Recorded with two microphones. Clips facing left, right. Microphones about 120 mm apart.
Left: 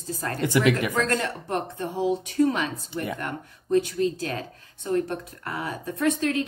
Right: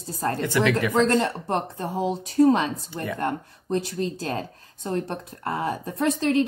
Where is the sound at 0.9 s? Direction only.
25° right (ahead or behind).